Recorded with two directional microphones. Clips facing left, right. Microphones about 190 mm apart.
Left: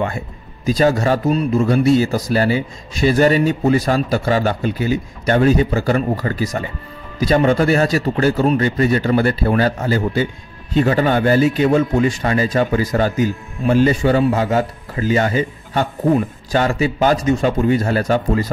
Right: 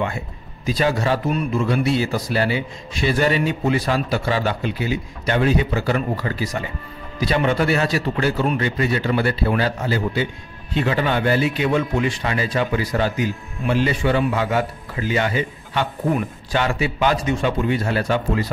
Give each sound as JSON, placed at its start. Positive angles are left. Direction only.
{"t": 0.7, "sound": "a man's voice", "side_deg": 45}
{"t": 16.1, "sound": "a man's voice", "side_deg": 30}
{"t": 16.6, "sound": "a man's voice", "side_deg": 40}